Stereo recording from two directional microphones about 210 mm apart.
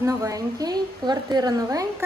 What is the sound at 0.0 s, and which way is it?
A woman's voice, 15° right (ahead or behind).